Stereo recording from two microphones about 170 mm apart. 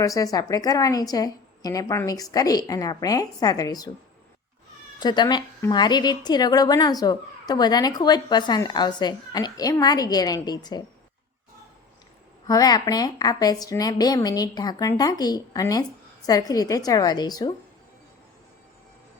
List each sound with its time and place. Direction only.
0.0 s a woman's voice: 20° left (ahead or behind)
4.9 s a woman's voice: 25° left (ahead or behind)
12.5 s a woman's voice: 20° left (ahead or behind)